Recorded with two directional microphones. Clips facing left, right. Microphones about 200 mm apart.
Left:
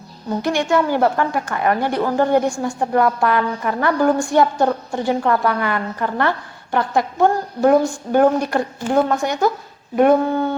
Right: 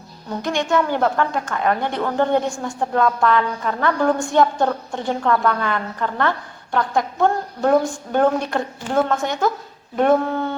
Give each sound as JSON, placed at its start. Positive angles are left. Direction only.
{"t": 0.7, "sound": "a woman's voice", "side_deg": 10}